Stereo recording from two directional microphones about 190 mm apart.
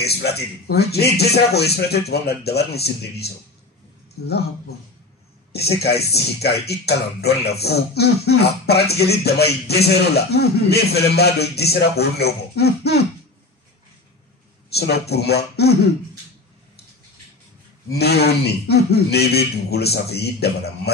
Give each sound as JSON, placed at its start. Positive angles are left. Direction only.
{"t": 0.0, "sound": "a man's voice", "side_deg": 60}
{"t": 5.5, "sound": "a man's voice", "side_deg": 55}
{"t": 14.7, "sound": "a man's voice", "side_deg": 60}
{"t": 17.8, "sound": "a man's voice", "side_deg": 60}